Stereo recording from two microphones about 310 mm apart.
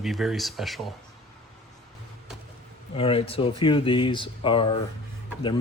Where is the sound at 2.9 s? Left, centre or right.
Centre.